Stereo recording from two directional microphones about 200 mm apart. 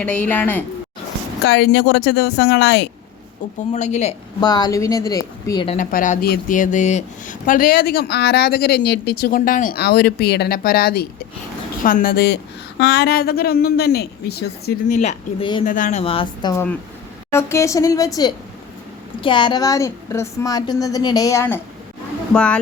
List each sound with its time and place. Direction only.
0.0 s a woman's voice: 5° left (ahead or behind)
1.5 s speech: 55° left (ahead or behind)
3.7 s speech: 35° left (ahead or behind)
4.4 s a woman's voice: 20° left (ahead or behind)
5.7 s speech: 40° left (ahead or behind)
14.9 s a woman's voice: 35° left (ahead or behind); by 21.6 s 15° left (ahead or behind)
22.3 s speech: 5° left (ahead or behind)